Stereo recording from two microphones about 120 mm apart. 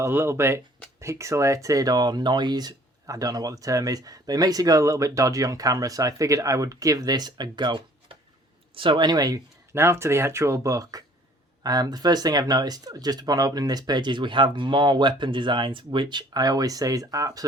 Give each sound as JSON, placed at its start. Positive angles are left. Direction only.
{"t": 0.0, "sound": "speech", "side_deg": -20}
{"t": 9.7, "sound": "speech", "side_deg": -20}